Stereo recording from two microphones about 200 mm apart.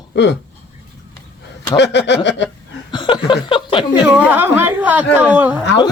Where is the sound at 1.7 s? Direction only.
60° left (ahead or behind).